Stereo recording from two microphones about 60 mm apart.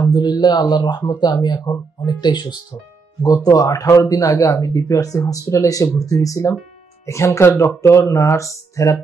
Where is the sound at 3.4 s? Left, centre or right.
Left.